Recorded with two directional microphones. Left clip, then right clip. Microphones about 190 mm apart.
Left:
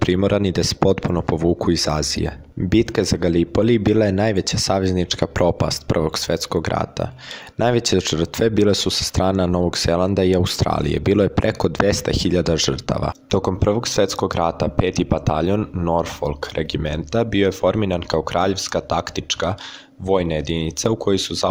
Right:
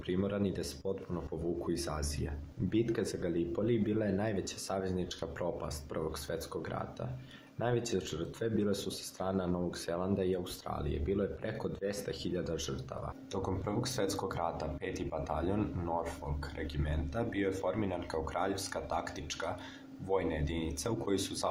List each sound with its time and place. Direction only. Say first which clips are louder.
0.1 s speech: left 12 dB; 45° left (ahead or behind)